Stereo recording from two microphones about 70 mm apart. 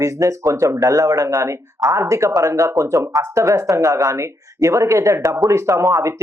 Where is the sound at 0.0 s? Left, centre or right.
Right.